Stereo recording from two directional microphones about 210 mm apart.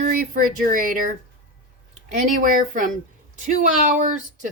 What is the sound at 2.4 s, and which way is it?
Speech, 40° right (ahead or behind).